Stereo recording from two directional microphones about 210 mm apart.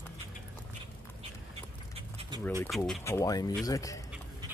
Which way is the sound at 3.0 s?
15° left (ahead or behind).